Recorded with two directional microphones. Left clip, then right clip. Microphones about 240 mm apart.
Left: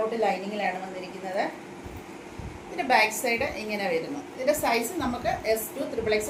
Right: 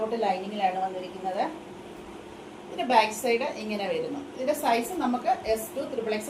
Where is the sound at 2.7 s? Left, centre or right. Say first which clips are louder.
Even; left.